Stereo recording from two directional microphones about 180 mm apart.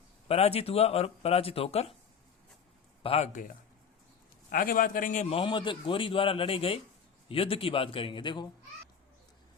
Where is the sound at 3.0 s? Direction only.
35° left (ahead or behind).